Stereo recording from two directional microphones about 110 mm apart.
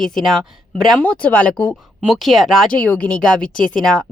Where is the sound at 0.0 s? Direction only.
Centre (ahead or behind).